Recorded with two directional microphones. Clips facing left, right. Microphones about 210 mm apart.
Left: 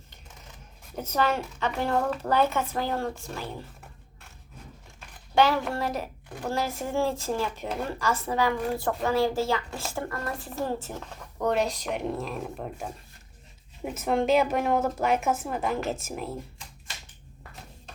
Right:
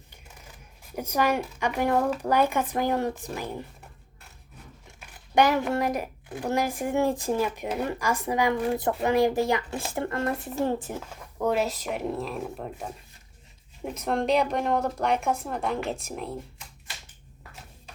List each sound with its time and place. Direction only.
0.9 s a woman's voice: 10° right (ahead or behind)
5.3 s a woman's voice: 15° right (ahead or behind); by 16.3 s centre (ahead or behind)